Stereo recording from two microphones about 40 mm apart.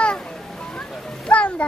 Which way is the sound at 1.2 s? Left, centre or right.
Left.